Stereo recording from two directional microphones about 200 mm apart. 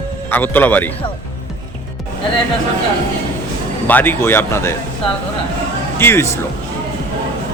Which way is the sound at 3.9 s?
10° left (ahead or behind).